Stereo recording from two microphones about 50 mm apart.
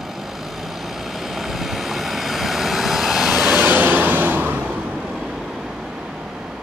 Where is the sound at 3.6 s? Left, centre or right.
Right.